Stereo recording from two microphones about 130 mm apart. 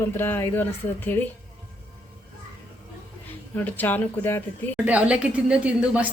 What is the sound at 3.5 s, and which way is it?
Speech, 15° left (ahead or behind).